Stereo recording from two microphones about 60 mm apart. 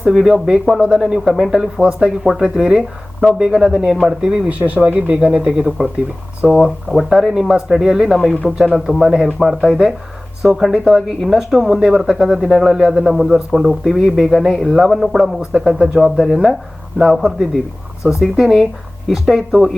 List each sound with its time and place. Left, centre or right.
0.0 s speech: centre
4.4 s speech: right
6.5 s speech: centre